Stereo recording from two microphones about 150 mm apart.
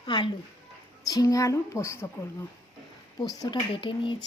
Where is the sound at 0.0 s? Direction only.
30° left (ahead or behind).